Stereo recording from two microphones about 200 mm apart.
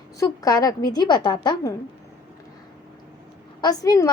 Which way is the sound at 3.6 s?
20° left (ahead or behind).